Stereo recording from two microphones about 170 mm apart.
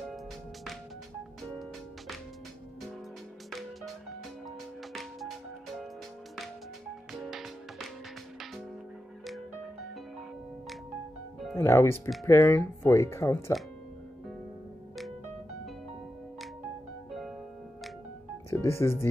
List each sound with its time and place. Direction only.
3.4 s music: centre (ahead or behind)
7.1 s music: centre (ahead or behind)
11.5 s speech: 15° left (ahead or behind)
18.5 s speech: 15° left (ahead or behind)